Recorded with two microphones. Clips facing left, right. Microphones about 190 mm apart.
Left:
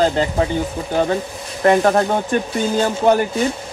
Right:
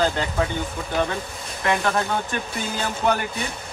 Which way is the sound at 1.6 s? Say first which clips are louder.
Left 9 dB; 40° left (ahead or behind).